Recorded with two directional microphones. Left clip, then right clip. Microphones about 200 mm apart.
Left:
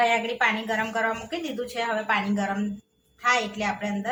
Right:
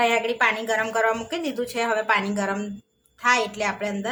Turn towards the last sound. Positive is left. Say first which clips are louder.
# right 3 dB
turn(degrees=-40)  # may be behind; listen again after turning